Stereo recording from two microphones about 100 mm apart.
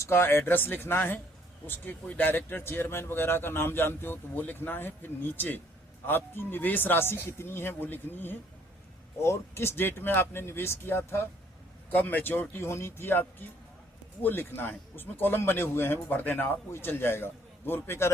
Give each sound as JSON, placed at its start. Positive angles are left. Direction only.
{"t": 0.0, "sound": "speech", "side_deg": 25}